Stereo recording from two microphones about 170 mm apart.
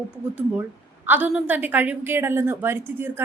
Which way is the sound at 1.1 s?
10° right (ahead or behind).